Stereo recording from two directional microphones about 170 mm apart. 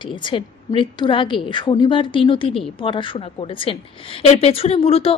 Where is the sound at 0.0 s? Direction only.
30° left (ahead or behind).